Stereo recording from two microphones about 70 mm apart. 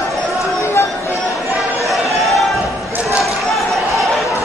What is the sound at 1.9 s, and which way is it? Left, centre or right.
Chatter, centre.